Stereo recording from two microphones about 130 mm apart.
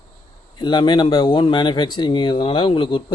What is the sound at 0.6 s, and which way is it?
Speech, 35° left (ahead or behind).